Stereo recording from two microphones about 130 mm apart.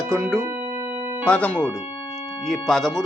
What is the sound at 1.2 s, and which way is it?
Speech, 10° left (ahead or behind).